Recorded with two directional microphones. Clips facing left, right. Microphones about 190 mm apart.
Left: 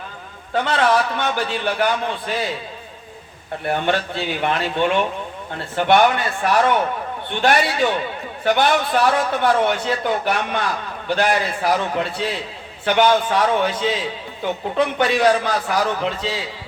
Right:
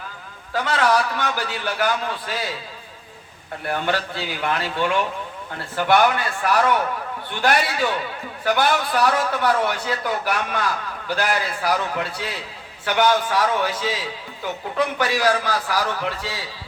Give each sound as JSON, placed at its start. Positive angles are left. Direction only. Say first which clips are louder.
{"t": 0.5, "sound": "a man's voice", "louder": "left 2 dB", "side_deg": 25}
{"t": 3.6, "sound": "a man's voice", "louder": "left 3 dB", "side_deg": 25}